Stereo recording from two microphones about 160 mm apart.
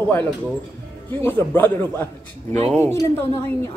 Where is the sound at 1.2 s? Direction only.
15° left (ahead or behind).